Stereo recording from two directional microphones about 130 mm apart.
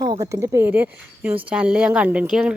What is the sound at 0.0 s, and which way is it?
Speech, 30° right (ahead or behind).